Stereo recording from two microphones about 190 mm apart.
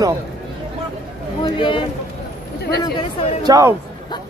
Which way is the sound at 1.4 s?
25° left (ahead or behind).